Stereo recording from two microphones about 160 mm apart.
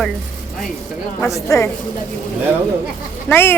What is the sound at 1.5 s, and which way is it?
Speech, 15° left (ahead or behind).